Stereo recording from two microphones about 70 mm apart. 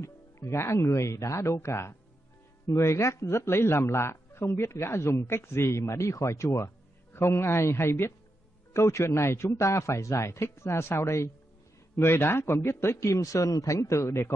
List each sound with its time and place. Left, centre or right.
0.0 s a man's voice: left